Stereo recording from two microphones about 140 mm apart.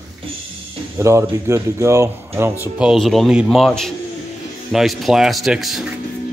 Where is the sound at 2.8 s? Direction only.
Centre (ahead or behind).